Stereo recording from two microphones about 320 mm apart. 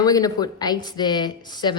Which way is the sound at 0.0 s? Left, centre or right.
Centre.